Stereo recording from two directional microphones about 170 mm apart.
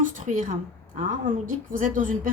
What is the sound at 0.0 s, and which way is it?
Speech, 50° right (ahead or behind).